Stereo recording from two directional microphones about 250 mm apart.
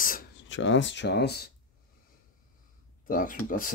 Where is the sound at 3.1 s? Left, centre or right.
Left.